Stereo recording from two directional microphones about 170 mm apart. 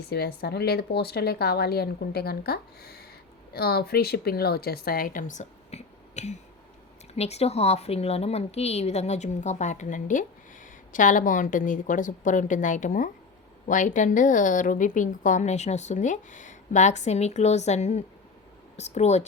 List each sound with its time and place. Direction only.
0.0 s a woman's voice: 70° left (ahead or behind); by 19.2 s 40° left (ahead or behind)